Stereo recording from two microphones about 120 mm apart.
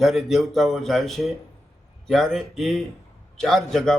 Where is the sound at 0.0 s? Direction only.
Centre (ahead or behind).